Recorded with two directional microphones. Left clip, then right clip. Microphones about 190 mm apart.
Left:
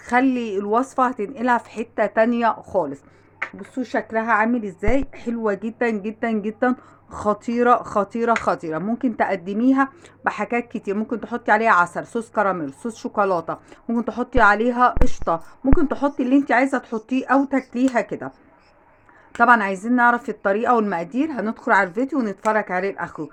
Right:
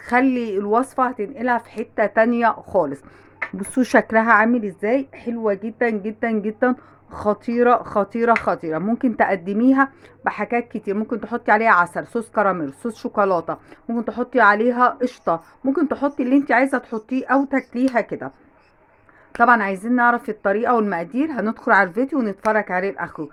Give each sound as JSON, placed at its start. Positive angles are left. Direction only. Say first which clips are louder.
{"t": 0.0, "sound": "a woman's voice", "louder": "right 1 dB", "side_deg": -5}
{"t": 3.6, "sound": "speech", "louder": "right 9 dB", "side_deg": -55}
{"t": 4.0, "sound": "a woman's voice", "louder": "even", "side_deg": -30}
{"t": 13.8, "sound": "a woman's voice", "louder": "even", "side_deg": 5}